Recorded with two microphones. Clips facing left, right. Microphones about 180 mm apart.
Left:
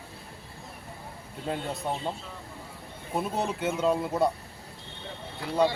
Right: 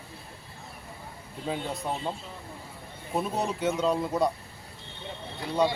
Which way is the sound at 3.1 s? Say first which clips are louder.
Even; 5° left (ahead or behind).